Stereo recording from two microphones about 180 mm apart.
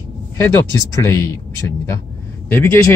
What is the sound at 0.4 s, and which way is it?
Speech, 15° left (ahead or behind).